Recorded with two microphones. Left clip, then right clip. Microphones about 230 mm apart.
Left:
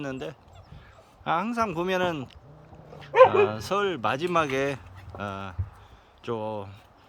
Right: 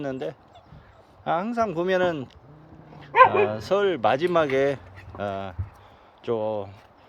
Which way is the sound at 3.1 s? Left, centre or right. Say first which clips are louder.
Right 1 dB; left.